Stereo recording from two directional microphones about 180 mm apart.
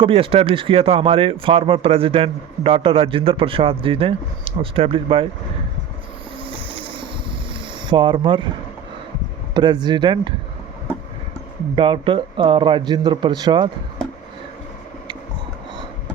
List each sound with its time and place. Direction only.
0.0 s speech: 30° right (ahead or behind)
6.4 s vehicle: 30° right (ahead or behind)
7.9 s a man's voice: 25° right (ahead or behind)
9.6 s a man's voice: 25° right (ahead or behind)
11.7 s a man's voice: 30° right (ahead or behind)